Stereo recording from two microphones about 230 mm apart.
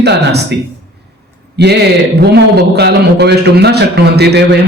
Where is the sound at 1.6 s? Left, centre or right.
Right.